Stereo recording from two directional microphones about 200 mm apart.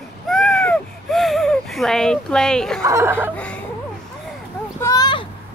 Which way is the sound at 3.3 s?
5° left (ahead or behind).